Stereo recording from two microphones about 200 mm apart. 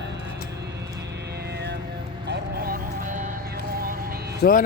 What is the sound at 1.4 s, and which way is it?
Music, 55° right (ahead or behind).